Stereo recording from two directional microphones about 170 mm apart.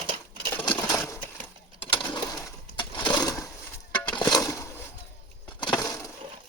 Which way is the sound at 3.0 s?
20° left (ahead or behind).